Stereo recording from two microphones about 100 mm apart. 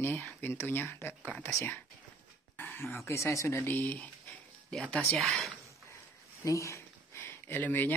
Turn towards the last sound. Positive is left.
turn(degrees=20)  # may be behind; listen again after turning